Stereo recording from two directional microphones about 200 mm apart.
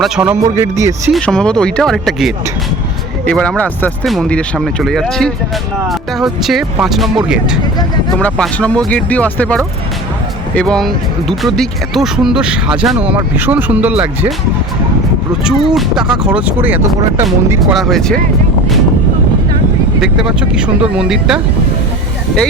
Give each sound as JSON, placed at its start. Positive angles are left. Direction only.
{"t": 0.0, "sound": "speech", "side_deg": -5}
{"t": 0.5, "sound": "speech", "side_deg": -15}
{"t": 1.1, "sound": "speech", "side_deg": 5}
{"t": 15.4, "sound": "speech", "side_deg": 0}
{"t": 17.6, "sound": "speech", "side_deg": 0}
{"t": 20.0, "sound": "speech", "side_deg": -5}